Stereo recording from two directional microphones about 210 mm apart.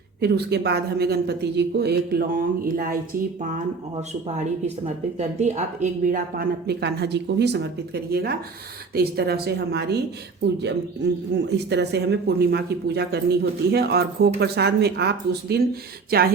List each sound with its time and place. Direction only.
0.2 s speech: 50° right (ahead or behind)
4.6 s speech: 30° right (ahead or behind); by 10.0 s 50° right (ahead or behind)
11.4 s speech: 55° right (ahead or behind)